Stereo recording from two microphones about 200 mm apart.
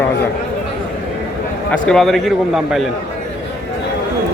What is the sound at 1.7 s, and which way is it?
Speech, centre (ahead or behind).